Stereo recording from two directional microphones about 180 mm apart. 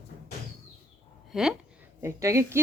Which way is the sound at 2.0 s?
15° right (ahead or behind).